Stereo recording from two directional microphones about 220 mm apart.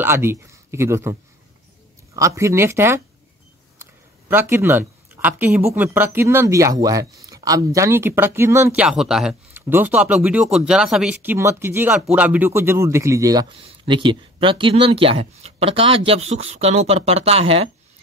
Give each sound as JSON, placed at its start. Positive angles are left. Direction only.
{"t": 0.0, "sound": "speech", "side_deg": -10}
{"t": 2.1, "sound": "speech", "side_deg": -15}
{"t": 3.7, "sound": "a sound", "side_deg": -10}
{"t": 5.8, "sound": "speech", "side_deg": -10}